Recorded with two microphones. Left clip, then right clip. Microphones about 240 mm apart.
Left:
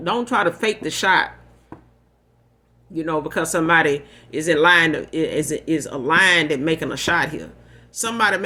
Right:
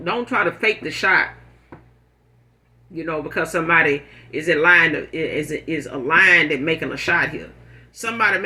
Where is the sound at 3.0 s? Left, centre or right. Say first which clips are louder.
Left 1 dB; left.